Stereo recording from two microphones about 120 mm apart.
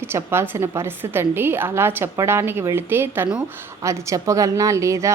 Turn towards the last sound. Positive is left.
turn(degrees=-25)  # may be behind; listen again after turning